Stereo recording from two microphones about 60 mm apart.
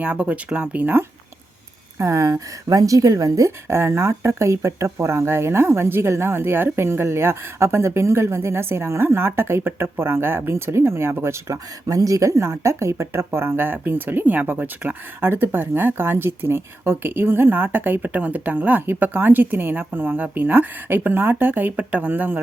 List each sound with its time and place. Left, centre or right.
0.0 s speech: right
2.0 s a woman's voice: right
3.7 s speech: right
11.5 s speech: right